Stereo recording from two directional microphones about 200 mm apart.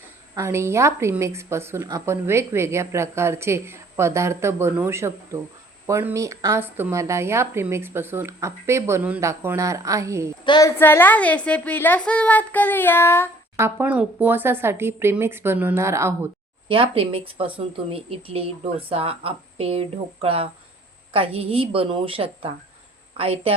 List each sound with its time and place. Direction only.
0.3 s a woman's voice: 15° right (ahead or behind)
10.4 s a woman's voice: 20° left (ahead or behind)
13.6 s a woman's voice: 10° right (ahead or behind)
16.6 s speech: 25° right (ahead or behind)